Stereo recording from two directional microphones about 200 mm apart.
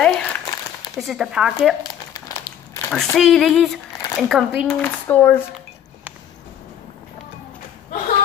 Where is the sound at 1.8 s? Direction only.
15° left (ahead or behind).